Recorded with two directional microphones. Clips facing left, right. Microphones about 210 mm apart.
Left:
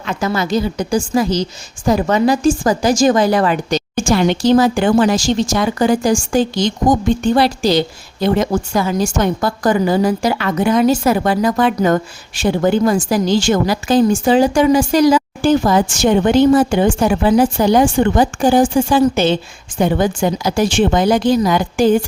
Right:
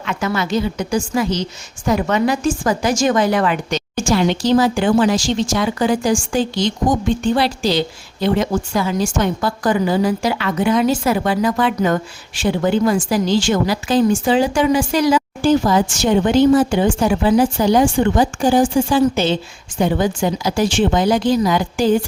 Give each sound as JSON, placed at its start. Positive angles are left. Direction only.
{"t": 0.0, "sound": "a woman's voice", "side_deg": 35}
{"t": 4.1, "sound": "a woman's voice", "side_deg": 55}
{"t": 15.4, "sound": "a woman's voice", "side_deg": 55}